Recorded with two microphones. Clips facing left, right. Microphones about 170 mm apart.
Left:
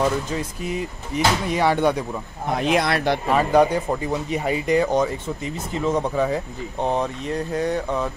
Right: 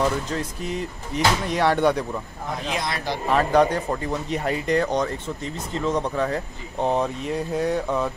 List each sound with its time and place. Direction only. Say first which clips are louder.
0.0 s speech: left 1 dB; 5° left (ahead or behind)
2.5 s speech: left 8 dB; 65° left (ahead or behind)
3.3 s speech: even; 5° left (ahead or behind)